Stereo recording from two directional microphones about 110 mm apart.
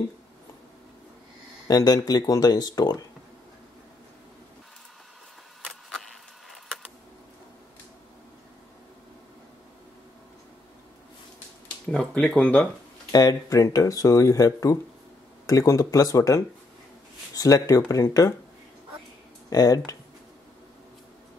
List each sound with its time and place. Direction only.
1.7 s speech: 35° left (ahead or behind)
5.6 s a sound: centre (ahead or behind)
11.9 s speech: 10° left (ahead or behind)
13.1 s speech: 30° left (ahead or behind)
19.5 s speech: 35° left (ahead or behind)